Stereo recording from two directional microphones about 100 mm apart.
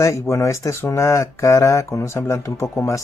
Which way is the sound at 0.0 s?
30° left (ahead or behind).